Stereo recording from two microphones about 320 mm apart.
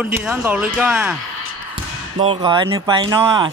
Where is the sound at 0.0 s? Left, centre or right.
Centre.